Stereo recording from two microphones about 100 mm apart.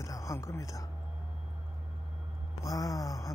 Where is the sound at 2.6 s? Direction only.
35° left (ahead or behind).